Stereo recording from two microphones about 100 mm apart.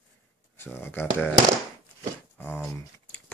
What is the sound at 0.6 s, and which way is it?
Speech, 20° left (ahead or behind).